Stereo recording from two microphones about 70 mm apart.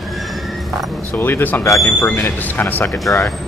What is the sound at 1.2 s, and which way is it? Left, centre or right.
Speech, left.